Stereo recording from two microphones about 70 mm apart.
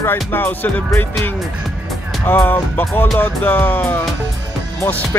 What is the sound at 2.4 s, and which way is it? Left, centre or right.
Speech, left.